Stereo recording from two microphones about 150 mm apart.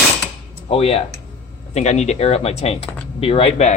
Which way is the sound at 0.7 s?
40° left (ahead or behind).